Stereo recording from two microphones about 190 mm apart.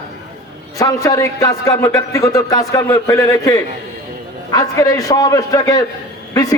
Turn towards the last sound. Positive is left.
turn(degrees=20)  # may be behind; listen again after turning